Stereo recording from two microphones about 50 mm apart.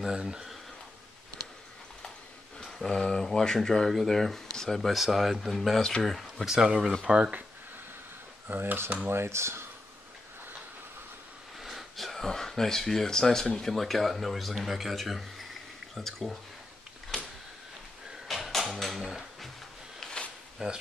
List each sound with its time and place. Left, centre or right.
0.1 s speech: centre
2.9 s speech: centre
5.8 s speech: centre
6.4 s speech: centre
8.5 s speech: right
9.1 s speech: right
11.6 s speech: centre
18.3 s a sound: centre
20.0 s a sound: centre
20.5 s speech: centre